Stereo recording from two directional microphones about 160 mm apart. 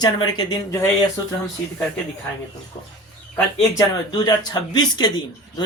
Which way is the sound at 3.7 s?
25° left (ahead or behind).